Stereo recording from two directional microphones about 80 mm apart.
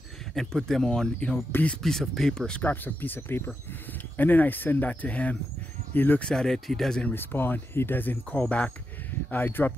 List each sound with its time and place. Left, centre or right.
0.3 s speech: centre
1.5 s speech: centre
1.8 s speech: centre
2.6 s speech: left
6.2 s speech: centre
7.0 s speech: left